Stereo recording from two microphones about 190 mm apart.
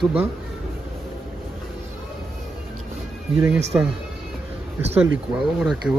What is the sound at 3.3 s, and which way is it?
Speech, 15° right (ahead or behind).